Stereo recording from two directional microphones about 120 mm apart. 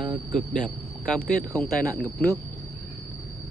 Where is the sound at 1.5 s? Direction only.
20° left (ahead or behind).